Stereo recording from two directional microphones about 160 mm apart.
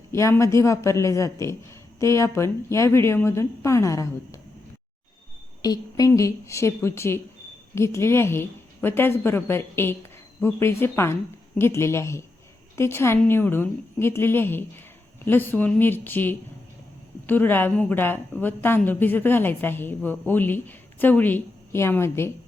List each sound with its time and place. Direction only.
0.1 s a woman's voice: 20° left (ahead or behind)
5.6 s a woman's voice: 25° left (ahead or behind)